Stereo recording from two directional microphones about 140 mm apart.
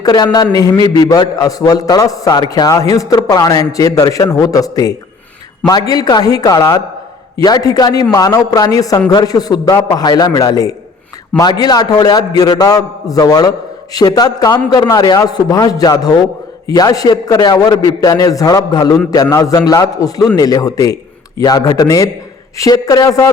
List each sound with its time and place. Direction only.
0.0 s a man's voice: 30° left (ahead or behind)